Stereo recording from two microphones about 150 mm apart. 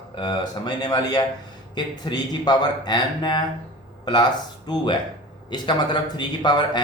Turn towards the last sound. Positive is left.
turn(degrees=30)  # may be behind; listen again after turning